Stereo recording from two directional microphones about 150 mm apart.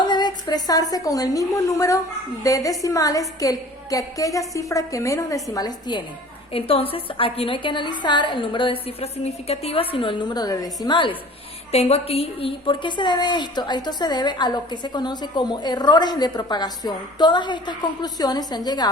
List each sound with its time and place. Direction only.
0.0 s a woman's voice: 30° left (ahead or behind)
6.5 s a woman's voice: 40° left (ahead or behind)
11.7 s a woman's voice: 45° left (ahead or behind); by 18.9 s 25° left (ahead or behind)